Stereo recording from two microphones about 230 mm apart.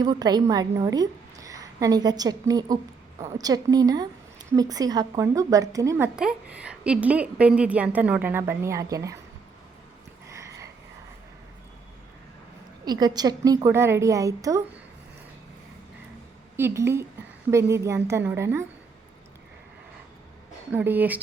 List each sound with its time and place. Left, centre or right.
0.0 s a woman's voice: centre
10.2 s a sound: centre
12.8 s a woman's voice: centre
16.6 s a woman's voice: centre
20.7 s a woman's voice: centre